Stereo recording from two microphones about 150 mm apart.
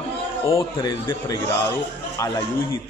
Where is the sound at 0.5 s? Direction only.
30° left (ahead or behind).